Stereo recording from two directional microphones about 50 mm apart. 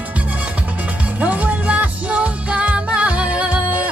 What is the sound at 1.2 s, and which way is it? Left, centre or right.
Music, right.